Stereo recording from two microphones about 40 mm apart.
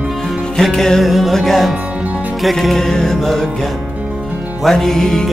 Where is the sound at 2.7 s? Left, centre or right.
Centre.